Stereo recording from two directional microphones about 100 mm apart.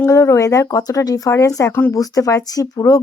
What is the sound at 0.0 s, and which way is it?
A woman's voice, 30° left (ahead or behind).